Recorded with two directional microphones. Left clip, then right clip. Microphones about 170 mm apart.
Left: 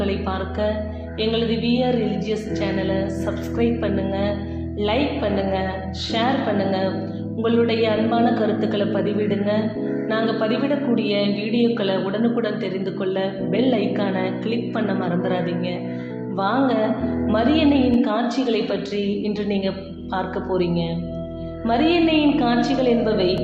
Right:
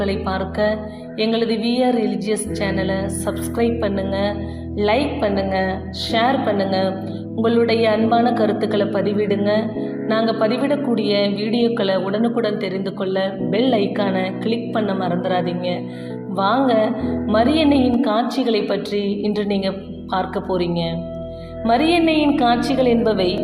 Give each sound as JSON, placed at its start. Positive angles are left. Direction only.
{"t": 0.0, "sound": "a woman's voice", "side_deg": -45}